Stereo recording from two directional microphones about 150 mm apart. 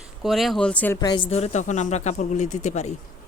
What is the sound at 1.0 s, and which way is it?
Speech, 30° left (ahead or behind).